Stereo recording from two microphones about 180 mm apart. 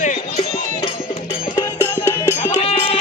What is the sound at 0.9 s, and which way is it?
Music, 25° left (ahead or behind).